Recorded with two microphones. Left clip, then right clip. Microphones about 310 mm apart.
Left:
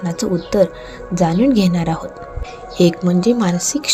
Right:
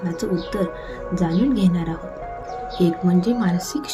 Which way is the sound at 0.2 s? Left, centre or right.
Left.